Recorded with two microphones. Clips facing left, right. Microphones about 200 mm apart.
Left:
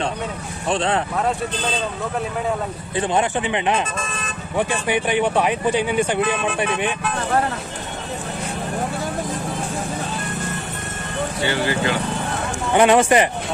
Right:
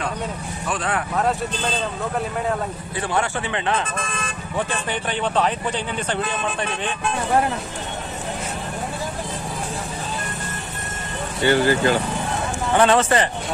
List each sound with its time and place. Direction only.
0.7 s speech: 25° left (ahead or behind)
1.1 s speech: centre (ahead or behind)
3.0 s speech: 20° left (ahead or behind)
3.8 s speech: 55° right (ahead or behind)
4.6 s speech: 10° left (ahead or behind)
11.4 s speech: 45° right (ahead or behind)
12.7 s speech: 15° left (ahead or behind)